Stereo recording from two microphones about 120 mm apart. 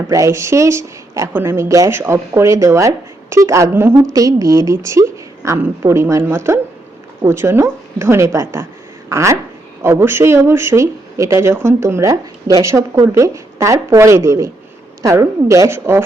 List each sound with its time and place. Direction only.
0.1 s speech: 25° right (ahead or behind)